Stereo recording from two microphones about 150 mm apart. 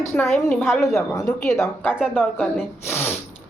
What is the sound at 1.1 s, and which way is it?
A woman's voice, 25° left (ahead or behind).